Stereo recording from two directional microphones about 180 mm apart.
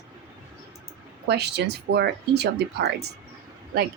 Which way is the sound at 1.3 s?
70° right (ahead or behind).